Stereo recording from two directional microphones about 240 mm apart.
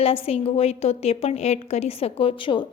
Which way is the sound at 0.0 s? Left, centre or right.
Left.